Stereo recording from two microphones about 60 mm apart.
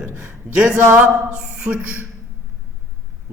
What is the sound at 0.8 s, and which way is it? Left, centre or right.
Speech, right.